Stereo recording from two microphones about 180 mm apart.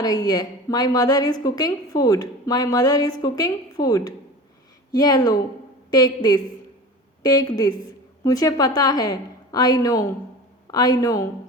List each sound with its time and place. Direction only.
0.0 s a woman's voice: 20° left (ahead or behind)